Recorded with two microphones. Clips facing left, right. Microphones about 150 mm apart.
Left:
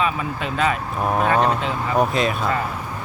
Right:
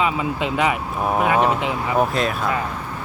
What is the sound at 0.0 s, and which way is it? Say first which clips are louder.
Speech: right 2 dB; 15° right (ahead or behind).